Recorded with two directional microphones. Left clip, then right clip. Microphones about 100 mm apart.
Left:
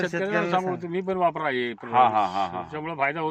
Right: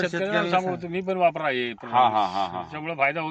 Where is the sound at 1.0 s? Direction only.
45° right (ahead or behind).